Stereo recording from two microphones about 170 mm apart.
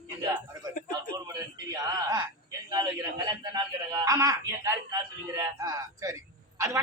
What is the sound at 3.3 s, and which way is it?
Speech, 25° right (ahead or behind).